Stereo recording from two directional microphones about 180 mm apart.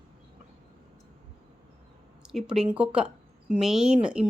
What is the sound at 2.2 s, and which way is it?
Speech, 5° right (ahead or behind).